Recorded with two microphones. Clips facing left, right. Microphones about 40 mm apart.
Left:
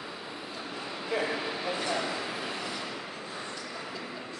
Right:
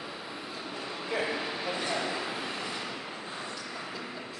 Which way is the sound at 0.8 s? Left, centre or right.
Centre.